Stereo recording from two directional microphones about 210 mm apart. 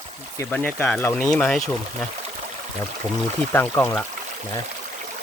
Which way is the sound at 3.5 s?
10° left (ahead or behind).